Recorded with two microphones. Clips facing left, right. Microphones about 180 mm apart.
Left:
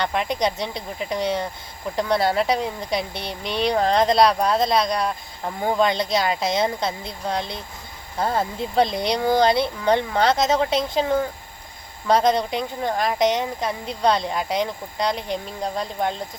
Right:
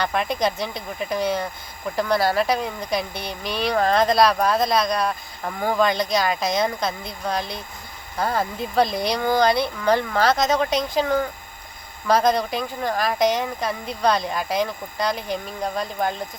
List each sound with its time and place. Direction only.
0.0 s speech: 20° left (ahead or behind)
12.0 s speech: 20° left (ahead or behind)